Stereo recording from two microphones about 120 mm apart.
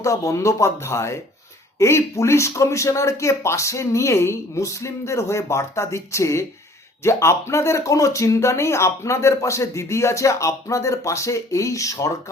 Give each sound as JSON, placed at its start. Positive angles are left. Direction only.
{"t": 0.0, "sound": "speech", "side_deg": 25}